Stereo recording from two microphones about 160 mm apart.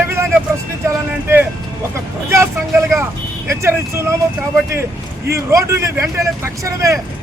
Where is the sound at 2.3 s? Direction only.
15° right (ahead or behind).